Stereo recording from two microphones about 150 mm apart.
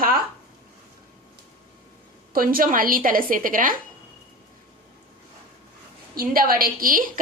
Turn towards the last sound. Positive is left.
turn(degrees=-65)  # may be behind; listen again after turning